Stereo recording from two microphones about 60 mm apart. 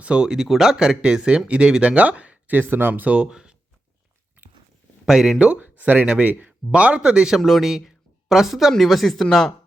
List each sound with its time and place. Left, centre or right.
0.0 s speech: centre
3.2 s speech: centre
5.0 s speech: centre
5.4 s speech: right; by 9.5 s centre